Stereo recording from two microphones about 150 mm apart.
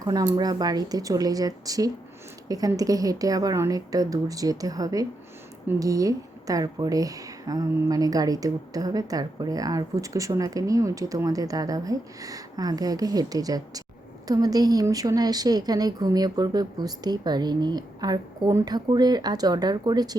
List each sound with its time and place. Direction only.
0.0 s speech: 25° right (ahead or behind)